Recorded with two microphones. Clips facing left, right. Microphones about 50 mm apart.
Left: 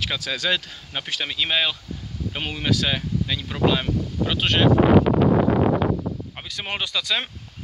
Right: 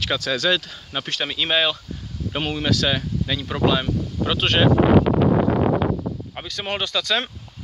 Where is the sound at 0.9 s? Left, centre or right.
Centre.